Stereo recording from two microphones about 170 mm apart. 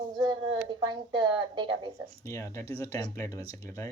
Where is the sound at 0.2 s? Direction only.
25° right (ahead or behind).